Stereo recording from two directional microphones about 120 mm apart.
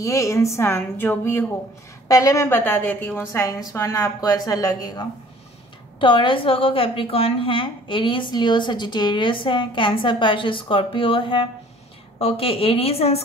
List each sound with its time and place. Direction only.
0.0 s a woman's voice: 25° left (ahead or behind)
5.9 s a woman's voice: 45° left (ahead or behind)